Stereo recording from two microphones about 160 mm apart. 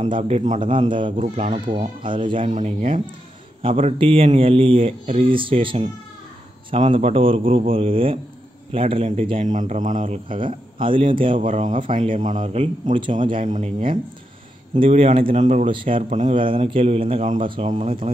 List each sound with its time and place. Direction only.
0.0 s a man's voice: 40° right (ahead or behind)
0.6 s speech: 35° right (ahead or behind)
1.1 s a man's voice: 45° right (ahead or behind)
2.0 s speech: 30° right (ahead or behind)
2.4 s a man's voice: 50° right (ahead or behind)
3.6 s speech: 35° right (ahead or behind)
9.4 s speech: 50° right (ahead or behind); by 11.4 s 30° right (ahead or behind)
11.4 s a man's voice: 50° right (ahead or behind)
13.2 s speech: 35° right (ahead or behind)
13.5 s a man's voice: 50° right (ahead or behind)
15.7 s speech: 30° right (ahead or behind)
16.1 s a man's voice: 50° right (ahead or behind)
16.3 s speech: 35° right (ahead or behind)
17.6 s a man's voice: 45° right (ahead or behind)